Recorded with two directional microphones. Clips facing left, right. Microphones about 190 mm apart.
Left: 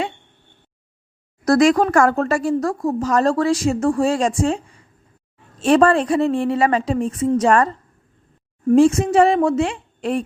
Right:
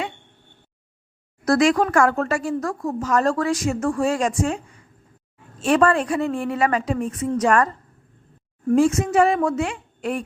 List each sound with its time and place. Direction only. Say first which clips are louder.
1.5 s speech: left 3 dB; 40° left (ahead or behind)
5.6 s a woman's voice: left 4 dB; 30° left (ahead or behind)